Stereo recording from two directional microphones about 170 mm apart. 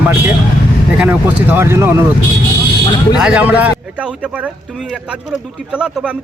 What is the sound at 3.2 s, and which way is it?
A man's voice, 5° right (ahead or behind).